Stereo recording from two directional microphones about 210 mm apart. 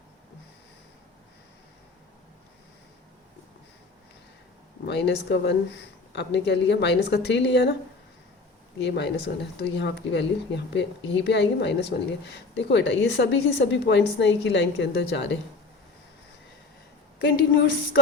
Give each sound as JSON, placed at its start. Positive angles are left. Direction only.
{"t": 4.9, "sound": "speech", "side_deg": 55}
{"t": 8.8, "sound": "speech", "side_deg": 55}